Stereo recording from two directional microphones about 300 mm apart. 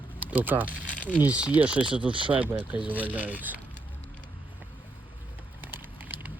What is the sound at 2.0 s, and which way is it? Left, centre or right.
Speech, centre.